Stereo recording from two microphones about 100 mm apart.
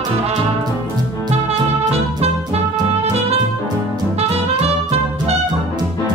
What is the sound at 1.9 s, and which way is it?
Music, 90° right.